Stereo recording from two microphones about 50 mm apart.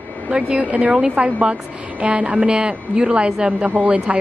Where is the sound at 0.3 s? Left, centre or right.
Right.